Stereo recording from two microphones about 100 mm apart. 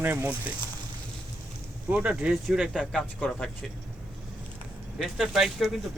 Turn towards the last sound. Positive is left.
turn(degrees=0)  # may be behind; listen again after turning